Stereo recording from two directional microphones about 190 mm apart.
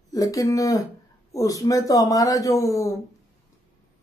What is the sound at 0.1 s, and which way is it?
Speech, 20° left (ahead or behind).